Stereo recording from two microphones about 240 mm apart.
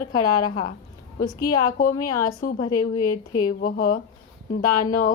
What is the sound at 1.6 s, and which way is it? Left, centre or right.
Speech, left.